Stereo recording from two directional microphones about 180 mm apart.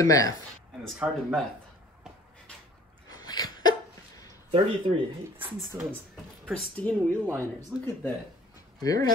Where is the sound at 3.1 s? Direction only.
20° left (ahead or behind).